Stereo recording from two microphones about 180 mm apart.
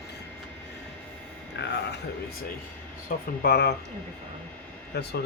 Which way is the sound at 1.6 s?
75° left (ahead or behind).